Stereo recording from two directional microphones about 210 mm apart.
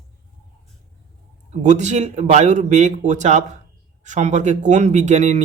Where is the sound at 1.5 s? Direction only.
35° right (ahead or behind).